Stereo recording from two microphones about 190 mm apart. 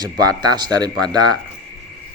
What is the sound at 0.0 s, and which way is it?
Speech, 20° right (ahead or behind).